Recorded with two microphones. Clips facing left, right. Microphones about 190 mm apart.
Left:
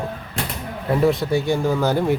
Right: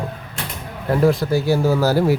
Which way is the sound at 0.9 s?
Centre (ahead or behind).